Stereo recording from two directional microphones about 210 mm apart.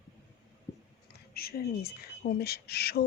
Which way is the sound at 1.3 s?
45° left (ahead or behind).